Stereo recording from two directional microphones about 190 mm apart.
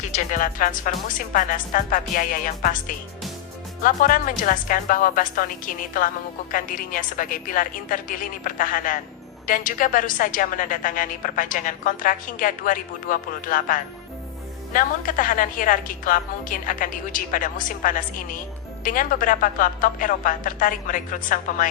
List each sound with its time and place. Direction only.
0.3 s a woman's voice: 45° left (ahead or behind)